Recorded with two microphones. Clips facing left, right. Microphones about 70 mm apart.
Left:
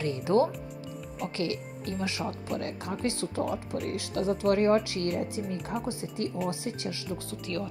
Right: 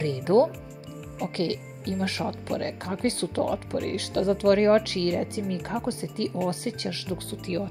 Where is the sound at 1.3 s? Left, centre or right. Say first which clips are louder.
Right 3 dB; right.